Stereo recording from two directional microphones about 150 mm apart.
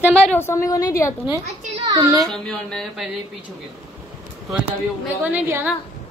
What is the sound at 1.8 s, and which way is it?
Speech, 25° right (ahead or behind).